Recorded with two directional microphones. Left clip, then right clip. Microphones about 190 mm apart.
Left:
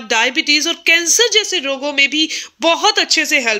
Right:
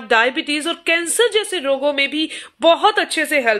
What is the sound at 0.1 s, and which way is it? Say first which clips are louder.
Speech: left 2 dB; 40° left (ahead or behind).